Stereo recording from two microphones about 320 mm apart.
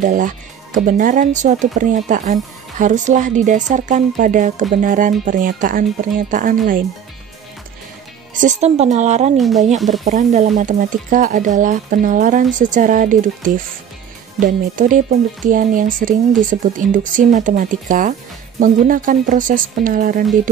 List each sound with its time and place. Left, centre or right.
0.0 s speech: right
8.4 s speech: right